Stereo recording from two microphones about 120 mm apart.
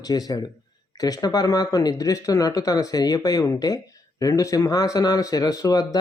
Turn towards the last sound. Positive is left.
turn(degrees=30)  # may be behind; listen again after turning